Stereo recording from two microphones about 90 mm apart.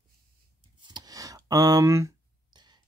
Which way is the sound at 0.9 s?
40° right (ahead or behind).